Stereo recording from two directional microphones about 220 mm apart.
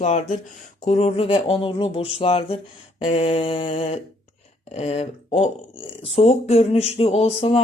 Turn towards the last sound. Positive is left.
turn(degrees=25)  # may be behind; listen again after turning